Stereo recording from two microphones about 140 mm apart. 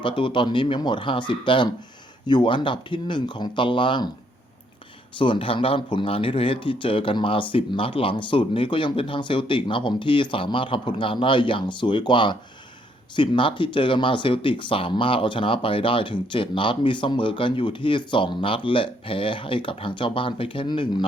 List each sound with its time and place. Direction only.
0.0 s speech: 35° left (ahead or behind)
5.1 s speech: 35° left (ahead or behind)